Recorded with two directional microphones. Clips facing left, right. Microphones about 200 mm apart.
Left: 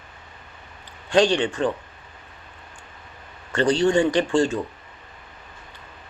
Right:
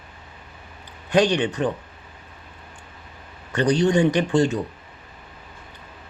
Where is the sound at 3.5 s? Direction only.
15° right (ahead or behind).